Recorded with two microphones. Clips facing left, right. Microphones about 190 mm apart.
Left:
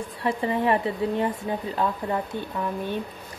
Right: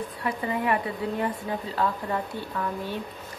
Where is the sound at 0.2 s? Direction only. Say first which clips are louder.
Left 4 dB; 25° left (ahead or behind).